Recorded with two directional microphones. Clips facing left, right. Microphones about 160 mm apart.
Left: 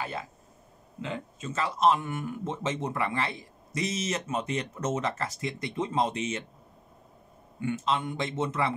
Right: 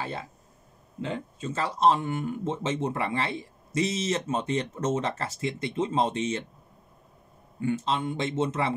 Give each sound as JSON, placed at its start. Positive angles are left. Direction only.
{"t": 1.0, "sound": "speech", "side_deg": -35}
{"t": 7.6, "sound": "speech", "side_deg": -30}